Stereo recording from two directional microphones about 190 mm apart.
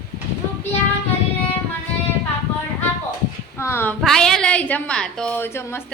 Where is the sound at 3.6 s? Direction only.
10° left (ahead or behind).